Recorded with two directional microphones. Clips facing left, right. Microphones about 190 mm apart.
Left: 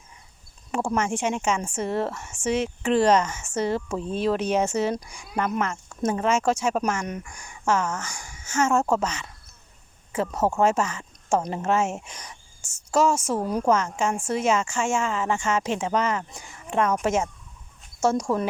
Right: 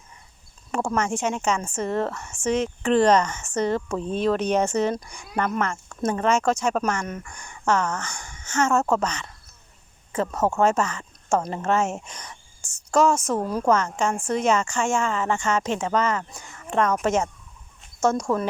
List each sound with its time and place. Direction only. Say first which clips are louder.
0.7 s speech: even; 10° left (ahead or behind)